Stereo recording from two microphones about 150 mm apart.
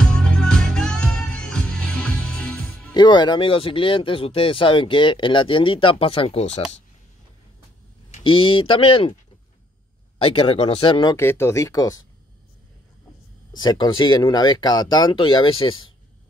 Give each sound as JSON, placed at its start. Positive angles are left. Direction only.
{"t": 0.0, "sound": "music", "side_deg": 5}
{"t": 2.9, "sound": "speech", "side_deg": 30}
{"t": 8.2, "sound": "speech", "side_deg": 35}
{"t": 10.1, "sound": "speech", "side_deg": 40}
{"t": 11.1, "sound": "speech", "side_deg": 15}
{"t": 13.6, "sound": "speech", "side_deg": 30}